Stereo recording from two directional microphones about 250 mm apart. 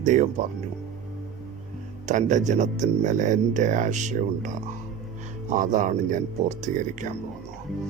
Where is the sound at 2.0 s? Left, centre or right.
Right.